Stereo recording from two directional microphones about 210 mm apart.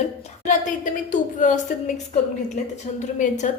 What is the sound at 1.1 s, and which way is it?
Speech, 35° left (ahead or behind).